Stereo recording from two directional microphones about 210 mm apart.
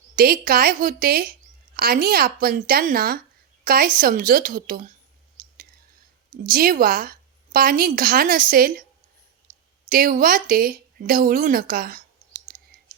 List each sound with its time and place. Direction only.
0.2 s a woman's voice: 45° right (ahead or behind)
6.5 s a woman's voice: 45° right (ahead or behind)
9.9 s speech: 40° right (ahead or behind)